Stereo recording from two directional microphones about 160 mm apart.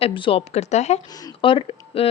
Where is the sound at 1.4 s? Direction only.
35° left (ahead or behind).